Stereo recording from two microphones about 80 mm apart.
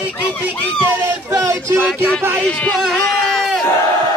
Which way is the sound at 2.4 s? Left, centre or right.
Centre.